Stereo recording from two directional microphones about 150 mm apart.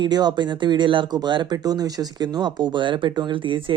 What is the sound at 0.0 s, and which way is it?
Speech, 25° right (ahead or behind).